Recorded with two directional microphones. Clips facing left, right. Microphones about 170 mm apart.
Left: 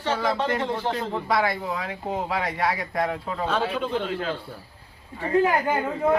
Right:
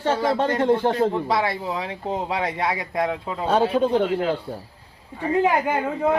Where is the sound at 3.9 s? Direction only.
20° right (ahead or behind).